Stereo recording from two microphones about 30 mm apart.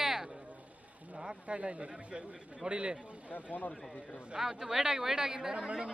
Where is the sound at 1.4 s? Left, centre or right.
Right.